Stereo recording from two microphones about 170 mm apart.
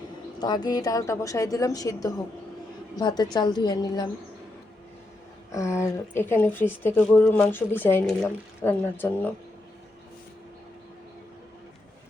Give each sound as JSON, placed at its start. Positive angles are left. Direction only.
{"t": 0.3, "sound": "a woman's voice", "side_deg": 25}
{"t": 5.5, "sound": "speech", "side_deg": 15}